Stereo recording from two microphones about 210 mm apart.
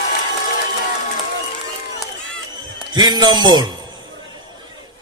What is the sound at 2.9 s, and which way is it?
Speech, 20° right (ahead or behind).